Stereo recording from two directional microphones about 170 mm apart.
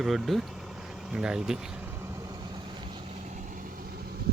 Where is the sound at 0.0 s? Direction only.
Centre (ahead or behind).